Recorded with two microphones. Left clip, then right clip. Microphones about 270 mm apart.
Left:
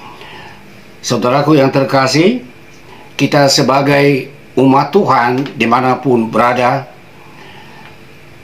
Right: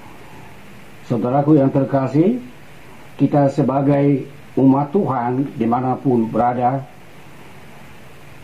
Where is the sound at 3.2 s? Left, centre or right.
Centre.